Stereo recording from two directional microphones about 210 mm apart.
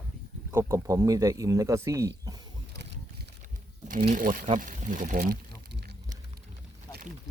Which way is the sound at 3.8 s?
40° right (ahead or behind).